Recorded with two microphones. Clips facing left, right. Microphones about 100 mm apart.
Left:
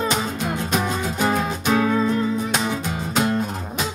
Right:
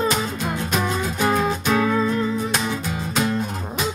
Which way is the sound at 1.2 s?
20° left (ahead or behind).